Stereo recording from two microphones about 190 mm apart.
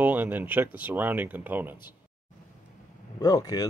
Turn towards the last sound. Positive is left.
turn(degrees=20)  # may be behind; listen again after turning